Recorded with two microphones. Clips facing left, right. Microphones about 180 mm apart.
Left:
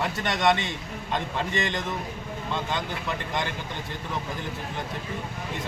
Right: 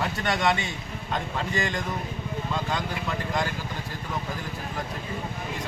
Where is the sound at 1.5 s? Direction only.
25° left (ahead or behind).